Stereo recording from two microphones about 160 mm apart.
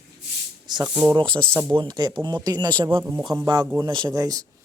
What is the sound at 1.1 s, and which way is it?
Speech, 30° right (ahead or behind).